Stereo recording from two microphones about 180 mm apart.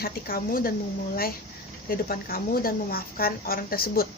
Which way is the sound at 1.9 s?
55° left (ahead or behind).